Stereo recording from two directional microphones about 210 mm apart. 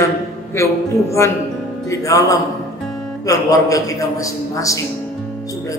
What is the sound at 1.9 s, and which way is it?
A man's voice, 15° left (ahead or behind).